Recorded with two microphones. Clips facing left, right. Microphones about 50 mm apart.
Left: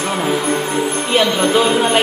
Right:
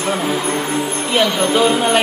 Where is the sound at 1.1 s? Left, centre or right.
Left.